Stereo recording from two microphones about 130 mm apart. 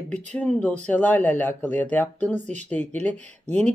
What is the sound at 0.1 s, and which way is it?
Speech, 10° left (ahead or behind).